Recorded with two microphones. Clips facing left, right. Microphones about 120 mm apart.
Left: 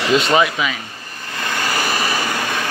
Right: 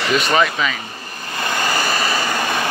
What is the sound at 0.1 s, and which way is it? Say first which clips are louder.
Speech: left 3 dB; 25° left (ahead or behind).